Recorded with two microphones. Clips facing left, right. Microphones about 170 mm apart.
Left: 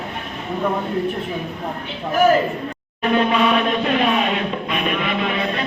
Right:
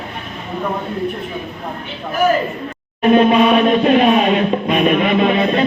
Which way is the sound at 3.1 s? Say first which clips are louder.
Right 6 dB; 20° right (ahead or behind).